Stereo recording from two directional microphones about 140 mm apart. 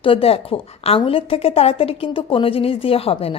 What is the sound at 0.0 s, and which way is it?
A woman's voice, 40° left (ahead or behind).